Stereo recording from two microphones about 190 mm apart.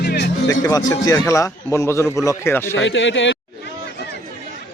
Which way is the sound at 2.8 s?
75° left (ahead or behind).